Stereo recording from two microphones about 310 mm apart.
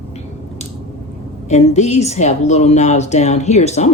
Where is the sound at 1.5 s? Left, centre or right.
Left.